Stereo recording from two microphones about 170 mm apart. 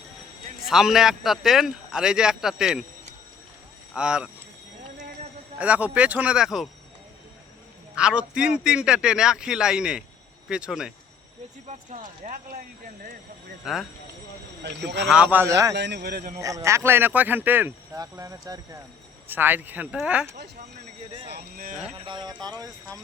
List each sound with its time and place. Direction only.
0.6 s speech: centre (ahead or behind)
3.9 s speech: 5° right (ahead or behind)
5.5 s speech: 10° right (ahead or behind)
7.9 s speech: 5° right (ahead or behind)
11.7 s speech: 45° right (ahead or behind)
14.6 s speech: 85° right
15.1 s speech: 10° right (ahead or behind)
15.7 s a man's voice: 80° right; by 16.3 s 60° right (ahead or behind)
16.4 s speech: 20° right (ahead or behind)
21.2 s speech: 65° right (ahead or behind)
21.9 s speech: 30° right (ahead or behind)